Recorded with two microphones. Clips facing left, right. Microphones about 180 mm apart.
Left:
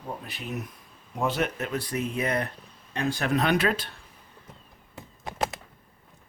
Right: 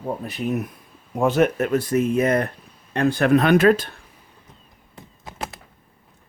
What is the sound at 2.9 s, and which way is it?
Speech, 60° right (ahead or behind).